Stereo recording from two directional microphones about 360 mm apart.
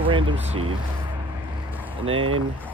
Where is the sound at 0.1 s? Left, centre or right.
Centre.